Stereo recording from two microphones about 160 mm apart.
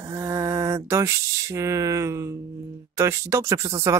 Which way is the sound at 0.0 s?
20° right (ahead or behind).